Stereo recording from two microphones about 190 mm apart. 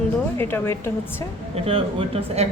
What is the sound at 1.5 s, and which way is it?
Speech, 30° right (ahead or behind).